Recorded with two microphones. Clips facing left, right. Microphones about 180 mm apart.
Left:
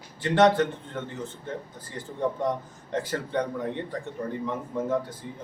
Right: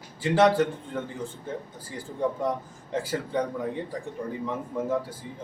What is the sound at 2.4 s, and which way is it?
A man's voice, 5° right (ahead or behind).